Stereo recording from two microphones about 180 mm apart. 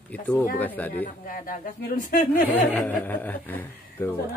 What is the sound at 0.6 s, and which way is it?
Speech, 10° left (ahead or behind).